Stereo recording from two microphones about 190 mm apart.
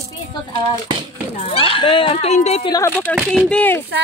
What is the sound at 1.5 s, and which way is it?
A woman's voice, 30° left (ahead or behind).